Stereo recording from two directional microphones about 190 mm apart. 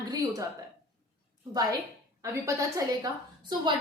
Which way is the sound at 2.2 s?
15° right (ahead or behind).